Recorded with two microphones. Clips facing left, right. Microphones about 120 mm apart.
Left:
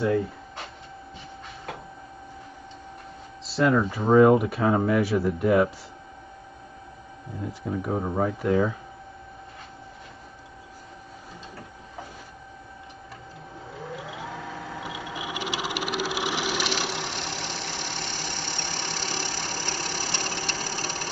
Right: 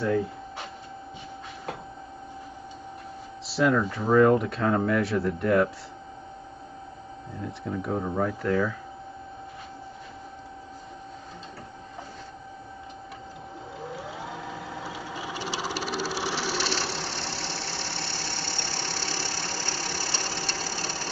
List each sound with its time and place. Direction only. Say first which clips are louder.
3.4 s speech: left 1 dB; centre (ahead or behind)
3.8 s speech: left 4 dB; 15° left (ahead or behind)
7.4 s speech: left 2 dB; 5° left (ahead or behind)
8.0 s speech: left 2 dB; 15° left (ahead or behind)
14.8 s a sound: left 1 dB; 15° left (ahead or behind)